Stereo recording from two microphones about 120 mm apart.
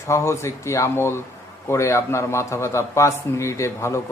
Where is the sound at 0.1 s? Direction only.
25° left (ahead or behind).